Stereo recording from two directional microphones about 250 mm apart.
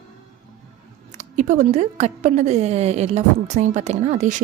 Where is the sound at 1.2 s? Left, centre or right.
Right.